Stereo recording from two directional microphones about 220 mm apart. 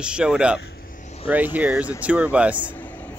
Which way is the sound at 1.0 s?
30° left (ahead or behind).